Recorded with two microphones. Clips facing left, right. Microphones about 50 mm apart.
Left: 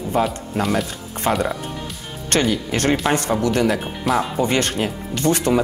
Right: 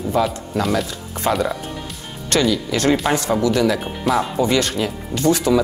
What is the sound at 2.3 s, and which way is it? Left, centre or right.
Speech, left.